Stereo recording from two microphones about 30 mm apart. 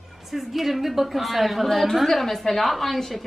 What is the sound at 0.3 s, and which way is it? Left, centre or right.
A woman's voice, centre.